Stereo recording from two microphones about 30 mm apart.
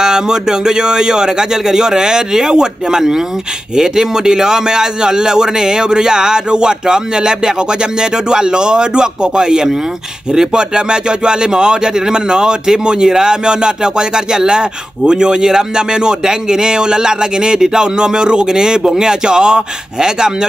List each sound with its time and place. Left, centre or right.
0.0 s speech: right